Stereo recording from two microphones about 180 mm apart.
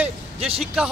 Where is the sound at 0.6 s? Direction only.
5° right (ahead or behind).